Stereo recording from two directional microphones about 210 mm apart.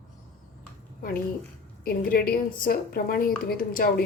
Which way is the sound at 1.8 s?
45° left (ahead or behind).